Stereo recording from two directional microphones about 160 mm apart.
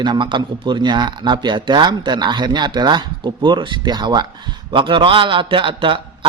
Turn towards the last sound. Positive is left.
turn(degrees=-30)  # may be behind; listen again after turning